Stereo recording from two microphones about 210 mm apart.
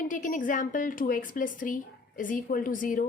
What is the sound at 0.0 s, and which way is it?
A woman's voice, 40° left (ahead or behind).